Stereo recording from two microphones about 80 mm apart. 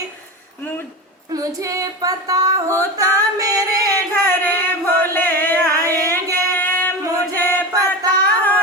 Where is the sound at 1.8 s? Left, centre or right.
Right.